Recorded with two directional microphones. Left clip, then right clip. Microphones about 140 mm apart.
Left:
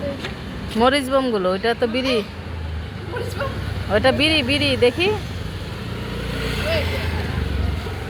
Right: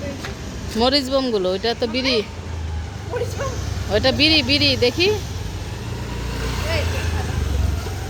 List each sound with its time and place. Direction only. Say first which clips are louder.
0.8 s speech: left 1 dB; 20° right (ahead or behind)
3.9 s speech: even; 20° right (ahead or behind)